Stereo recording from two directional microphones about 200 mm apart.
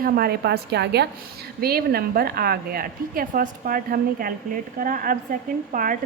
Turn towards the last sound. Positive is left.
turn(degrees=-40)  # may be behind; listen again after turning